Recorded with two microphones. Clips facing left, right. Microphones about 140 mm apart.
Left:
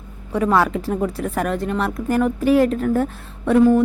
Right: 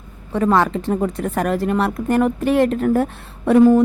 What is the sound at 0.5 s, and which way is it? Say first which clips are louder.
A woman's voice: right 1 dB; 5° left (ahead or behind).